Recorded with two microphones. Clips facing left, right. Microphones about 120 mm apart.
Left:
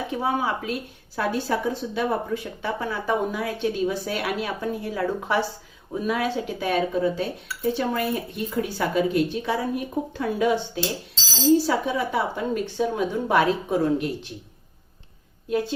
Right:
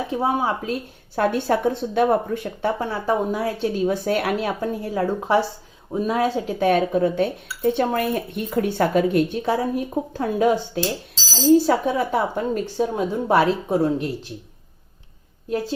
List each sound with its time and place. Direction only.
0.2 s speech: 30° right (ahead or behind)
1.1 s speech: 50° right (ahead or behind)
6.6 s speech: 50° right (ahead or behind); by 14.1 s 30° right (ahead or behind)